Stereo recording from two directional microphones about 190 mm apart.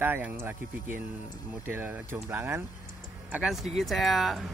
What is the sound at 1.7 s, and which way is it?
Speech, 10° right (ahead or behind).